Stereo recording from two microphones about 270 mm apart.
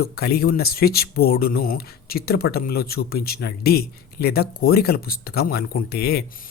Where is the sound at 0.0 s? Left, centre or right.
Left.